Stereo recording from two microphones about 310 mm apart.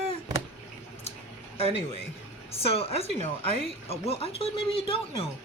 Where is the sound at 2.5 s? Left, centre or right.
Centre.